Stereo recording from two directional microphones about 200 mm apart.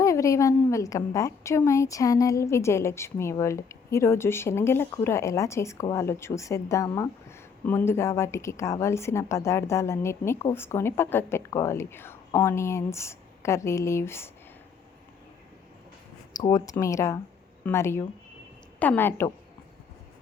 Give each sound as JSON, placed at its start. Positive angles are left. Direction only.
{"t": 0.0, "sound": "a woman's voice", "side_deg": 15}
{"t": 16.4, "sound": "a woman's voice", "side_deg": 20}